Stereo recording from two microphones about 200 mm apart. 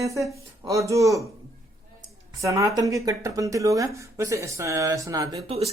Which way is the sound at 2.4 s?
15° right (ahead or behind).